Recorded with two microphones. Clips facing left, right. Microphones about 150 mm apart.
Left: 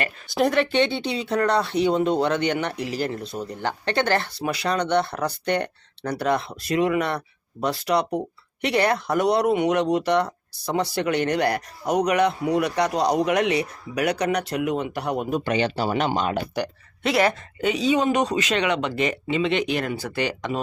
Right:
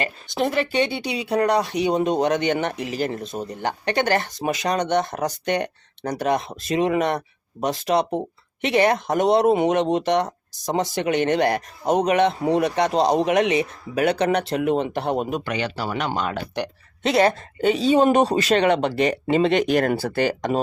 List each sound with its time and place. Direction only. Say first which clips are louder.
0.3 s speech: left 2 dB; centre (ahead or behind); by 15.3 s 25° right (ahead or behind)
15.4 s speech: left 3 dB; 25° left (ahead or behind)
17.0 s speech: right 3 dB; 25° right (ahead or behind); by 20.6 s 45° right (ahead or behind)